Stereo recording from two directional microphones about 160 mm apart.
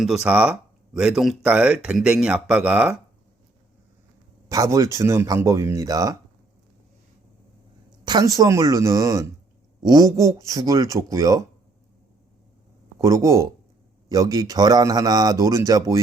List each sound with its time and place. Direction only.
0.0 s speech: 5° right (ahead or behind)
4.4 s speech: 20° right (ahead or behind)
8.0 s speech: 25° right (ahead or behind)
13.0 s speech: 20° right (ahead or behind)